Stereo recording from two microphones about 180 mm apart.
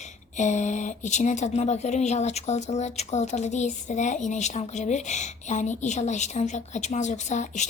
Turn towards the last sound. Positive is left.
turn(degrees=40)  # may be behind; listen again after turning